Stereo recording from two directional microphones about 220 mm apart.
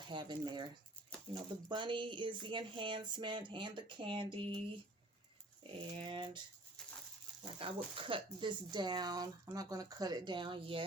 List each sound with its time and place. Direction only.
0.0 s speech: 20° right (ahead or behind)
5.6 s speech: 20° right (ahead or behind)
7.6 s speech: 25° right (ahead or behind)